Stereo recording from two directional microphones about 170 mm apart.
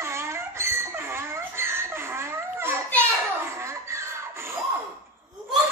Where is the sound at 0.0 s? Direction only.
15° right (ahead or behind).